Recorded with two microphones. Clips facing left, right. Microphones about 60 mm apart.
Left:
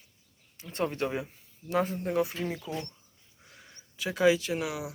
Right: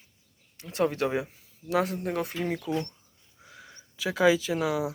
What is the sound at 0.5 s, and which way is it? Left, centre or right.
Speech, right.